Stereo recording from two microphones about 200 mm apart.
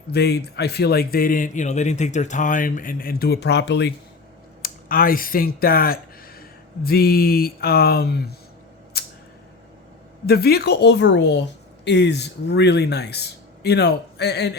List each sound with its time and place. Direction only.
0.1 s speech: 55° left (ahead or behind)
4.6 s speech: 45° left (ahead or behind)
8.9 s a sound: 50° left (ahead or behind)
10.2 s speech: 50° left (ahead or behind)